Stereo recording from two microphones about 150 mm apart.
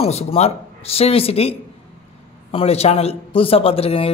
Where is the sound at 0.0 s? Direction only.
45° left (ahead or behind).